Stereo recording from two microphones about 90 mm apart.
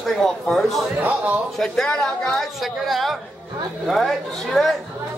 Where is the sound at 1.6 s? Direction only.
5° left (ahead or behind).